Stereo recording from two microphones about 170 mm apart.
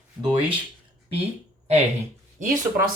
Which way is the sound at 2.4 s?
55° right (ahead or behind).